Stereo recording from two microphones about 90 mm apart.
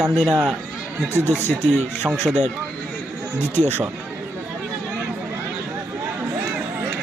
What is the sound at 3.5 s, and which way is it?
Speech, 20° left (ahead or behind).